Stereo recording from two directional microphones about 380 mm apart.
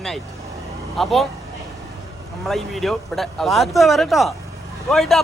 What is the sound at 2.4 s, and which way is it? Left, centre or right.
Speech, centre.